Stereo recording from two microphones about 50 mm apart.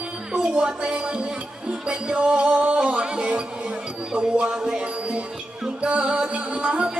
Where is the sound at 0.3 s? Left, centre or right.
Centre.